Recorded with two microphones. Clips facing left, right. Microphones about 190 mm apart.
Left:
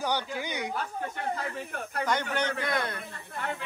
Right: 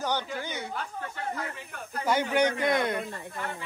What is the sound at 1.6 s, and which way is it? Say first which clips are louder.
Speech: left 4 dB; 55° left (ahead or behind).